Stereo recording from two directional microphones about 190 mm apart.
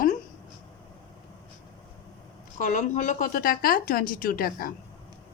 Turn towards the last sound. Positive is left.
turn(degrees=50)  # may be behind; listen again after turning